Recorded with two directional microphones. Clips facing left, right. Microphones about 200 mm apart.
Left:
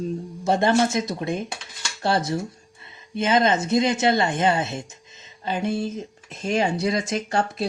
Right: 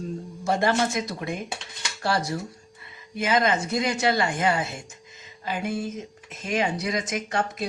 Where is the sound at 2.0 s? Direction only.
25° left (ahead or behind).